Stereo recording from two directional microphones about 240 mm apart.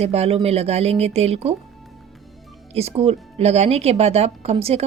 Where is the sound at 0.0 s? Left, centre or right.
Right.